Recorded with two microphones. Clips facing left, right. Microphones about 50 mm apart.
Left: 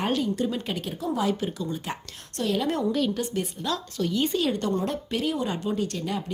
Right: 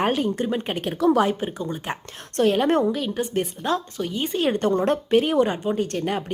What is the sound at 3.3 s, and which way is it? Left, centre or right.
Speech, right.